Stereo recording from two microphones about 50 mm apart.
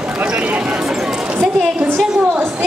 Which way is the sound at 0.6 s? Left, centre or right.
Centre.